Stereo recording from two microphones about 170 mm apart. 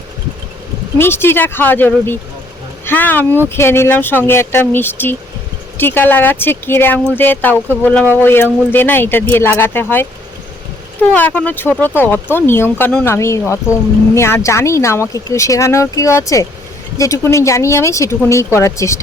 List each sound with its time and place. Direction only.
0.9 s speech: 15° left (ahead or behind)
11.1 s speech: 10° left (ahead or behind)